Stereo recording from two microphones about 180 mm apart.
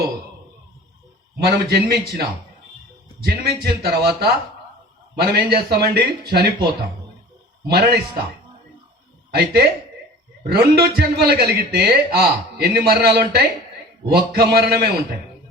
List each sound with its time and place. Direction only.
1.5 s a man's voice: 65° right (ahead or behind)
7.7 s a man's voice: 60° right (ahead or behind)
9.3 s a man's voice: 60° right (ahead or behind)